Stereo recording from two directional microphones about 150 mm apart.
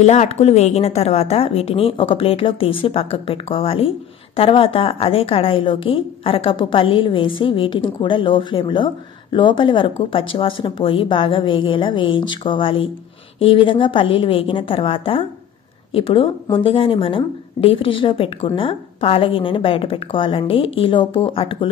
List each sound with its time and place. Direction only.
0.0 s a woman's voice: 50° left (ahead or behind)